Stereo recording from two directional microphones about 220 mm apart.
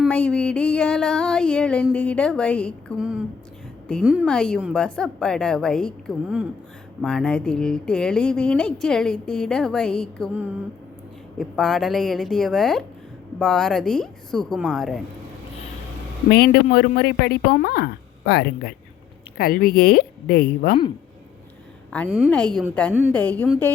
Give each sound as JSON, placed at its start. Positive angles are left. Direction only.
{"t": 0.0, "sound": "a sound", "side_deg": 5}
{"t": 3.8, "sound": "speech", "side_deg": 0}
{"t": 16.3, "sound": "speech", "side_deg": 45}
{"t": 21.9, "sound": "a woman's voice", "side_deg": 5}
{"t": 22.9, "sound": "a woman's voice", "side_deg": -5}
{"t": 23.1, "sound": "a woman's voice", "side_deg": 10}